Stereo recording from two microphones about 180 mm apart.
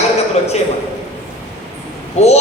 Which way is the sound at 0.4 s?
40° left (ahead or behind).